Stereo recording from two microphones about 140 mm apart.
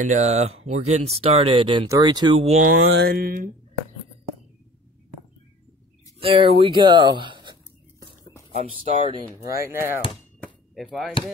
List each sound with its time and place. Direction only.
0.0 s speech: 55° right (ahead or behind); by 2.4 s 35° right (ahead or behind)
2.4 s speech: 55° right (ahead or behind)
3.1 s speech: 90° right
6.2 s speech: 40° right (ahead or behind)
9.6 s speech: 20° right (ahead or behind)
10.4 s a sound: centre (ahead or behind)